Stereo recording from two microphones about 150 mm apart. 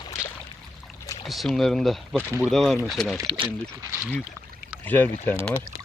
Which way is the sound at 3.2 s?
30° right (ahead or behind).